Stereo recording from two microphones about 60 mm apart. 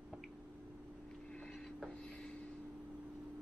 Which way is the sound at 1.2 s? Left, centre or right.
Centre.